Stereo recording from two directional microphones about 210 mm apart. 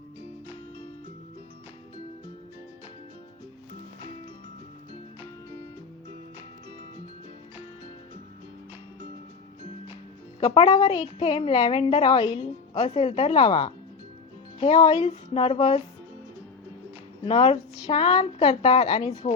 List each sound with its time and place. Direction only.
10.4 s a woman's voice: 25° left (ahead or behind)
17.2 s a woman's voice: 25° left (ahead or behind)